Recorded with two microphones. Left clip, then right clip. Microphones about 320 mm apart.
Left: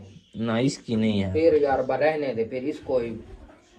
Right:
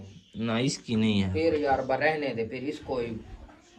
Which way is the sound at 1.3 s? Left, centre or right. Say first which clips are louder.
Left 6 dB; right.